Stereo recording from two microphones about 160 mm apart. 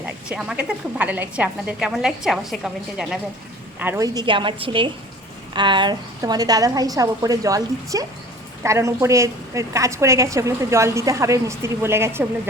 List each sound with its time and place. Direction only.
0.0 s a woman's voice: 5° right (ahead or behind)
3.8 s a woman's voice: 15° right (ahead or behind)